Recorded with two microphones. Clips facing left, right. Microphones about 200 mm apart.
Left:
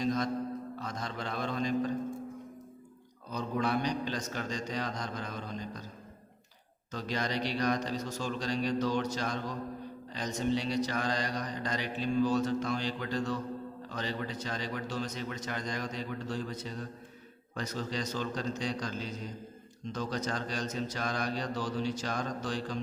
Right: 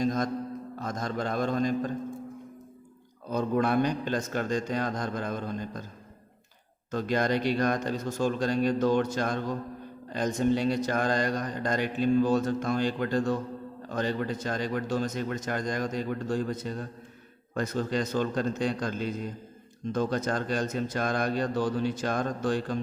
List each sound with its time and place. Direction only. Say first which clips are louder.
0.0 s mantra: right 3 dB; 45° right (ahead or behind)
0.8 s a man's voice: right 7 dB; 45° right (ahead or behind)
3.2 s a man's voice: right 6 dB; 50° right (ahead or behind)
6.9 s a man's voice: right 7 dB; 50° right (ahead or behind)